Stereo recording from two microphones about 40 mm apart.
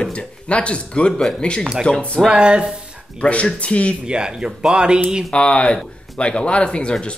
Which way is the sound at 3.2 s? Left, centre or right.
Left.